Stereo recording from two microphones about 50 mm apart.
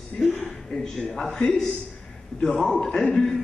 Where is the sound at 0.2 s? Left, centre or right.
Left.